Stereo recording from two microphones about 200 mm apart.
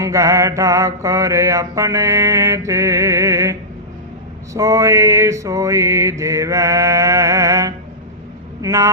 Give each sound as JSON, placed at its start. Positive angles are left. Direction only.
{"t": 0.0, "sound": "mantra", "side_deg": -15}